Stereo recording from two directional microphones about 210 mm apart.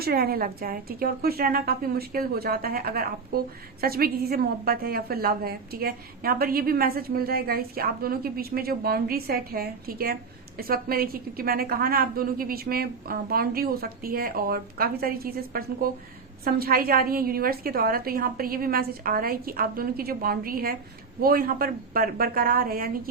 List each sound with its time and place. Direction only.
0.0 s a woman's voice: 45° right (ahead or behind)